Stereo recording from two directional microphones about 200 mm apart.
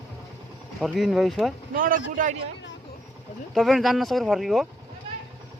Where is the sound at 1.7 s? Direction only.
45° right (ahead or behind).